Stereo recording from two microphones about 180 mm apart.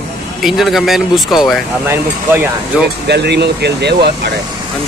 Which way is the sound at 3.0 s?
70° right (ahead or behind).